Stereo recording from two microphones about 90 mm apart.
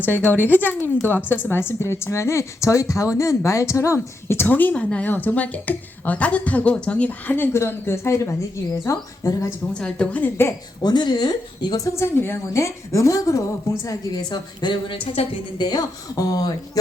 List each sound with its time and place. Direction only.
0.0 s speech: 20° left (ahead or behind)
4.4 s a woman's voice: 20° left (ahead or behind); by 9.5 s 35° left (ahead or behind)
9.7 s a woman's voice: 10° left (ahead or behind)
10.8 s speech: 55° left (ahead or behind)
11.9 s speech: 30° left (ahead or behind)
13.8 s a woman's voice: 55° left (ahead or behind); by 15.6 s 85° left
15.6 s speech: 50° left (ahead or behind)